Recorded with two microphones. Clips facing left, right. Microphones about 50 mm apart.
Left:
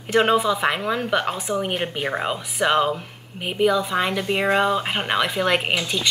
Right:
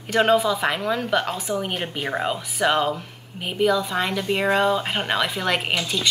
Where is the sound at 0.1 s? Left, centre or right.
Centre.